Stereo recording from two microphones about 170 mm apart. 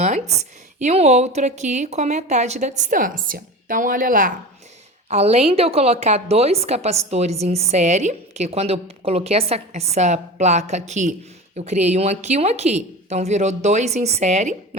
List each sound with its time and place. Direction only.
0.0 s a woman's voice: 40° right (ahead or behind)
5.0 s a woman's voice: 40° right (ahead or behind)